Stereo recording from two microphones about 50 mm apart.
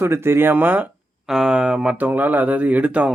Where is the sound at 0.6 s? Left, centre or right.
Right.